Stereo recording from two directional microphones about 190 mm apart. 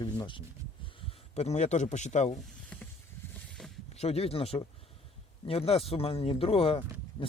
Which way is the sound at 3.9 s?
35° left (ahead or behind).